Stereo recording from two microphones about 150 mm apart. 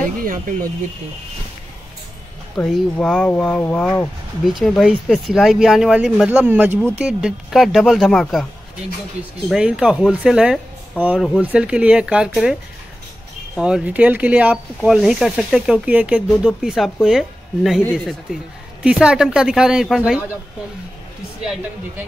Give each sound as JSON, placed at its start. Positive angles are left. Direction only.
{"t": 0.2, "sound": "speech", "side_deg": -65}
{"t": 2.6, "sound": "speech", "side_deg": 5}
{"t": 4.5, "sound": "speech", "side_deg": 0}
{"t": 9.5, "sound": "speech", "side_deg": -5}
{"t": 13.6, "sound": "speech", "side_deg": -5}
{"t": 21.4, "sound": "speech", "side_deg": -5}